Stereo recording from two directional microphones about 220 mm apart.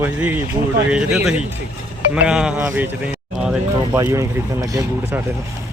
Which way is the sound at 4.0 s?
15° right (ahead or behind).